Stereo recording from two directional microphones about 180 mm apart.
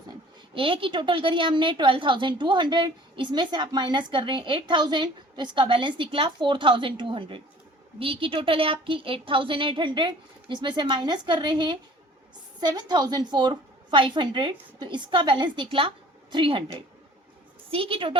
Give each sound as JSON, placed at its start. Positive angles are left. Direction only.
{"t": 0.5, "sound": "a woman's voice", "side_deg": -30}
{"t": 17.7, "sound": "a woman's voice", "side_deg": -30}